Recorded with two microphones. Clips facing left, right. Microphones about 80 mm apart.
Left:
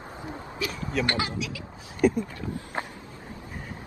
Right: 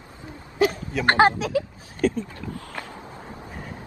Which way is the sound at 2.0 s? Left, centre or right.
Centre.